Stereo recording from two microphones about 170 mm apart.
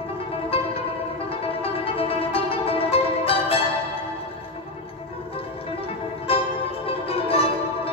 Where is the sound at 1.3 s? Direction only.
35° left (ahead or behind).